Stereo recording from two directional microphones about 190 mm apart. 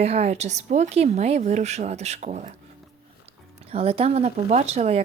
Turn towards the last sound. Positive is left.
turn(degrees=-35)  # may be behind; listen again after turning